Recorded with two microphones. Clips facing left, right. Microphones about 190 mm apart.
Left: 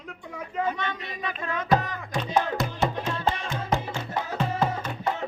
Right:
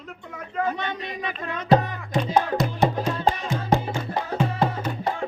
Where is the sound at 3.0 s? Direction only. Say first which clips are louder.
Right 4 dB; 35° right (ahead or behind).